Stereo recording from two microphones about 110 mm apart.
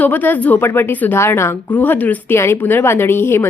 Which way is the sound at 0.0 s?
15° left (ahead or behind).